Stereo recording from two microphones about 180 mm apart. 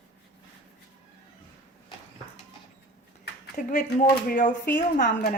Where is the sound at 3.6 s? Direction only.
45° left (ahead or behind).